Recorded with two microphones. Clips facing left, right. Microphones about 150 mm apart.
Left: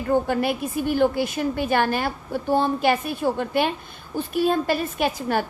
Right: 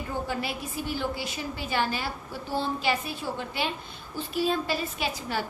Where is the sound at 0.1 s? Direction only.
55° left (ahead or behind).